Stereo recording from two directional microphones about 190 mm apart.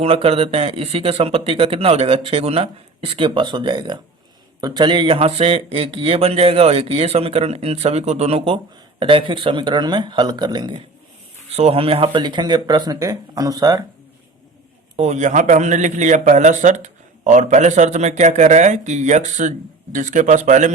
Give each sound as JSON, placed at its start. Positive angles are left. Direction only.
{"t": 0.0, "sound": "speech", "side_deg": -30}
{"t": 14.9, "sound": "speech", "side_deg": -35}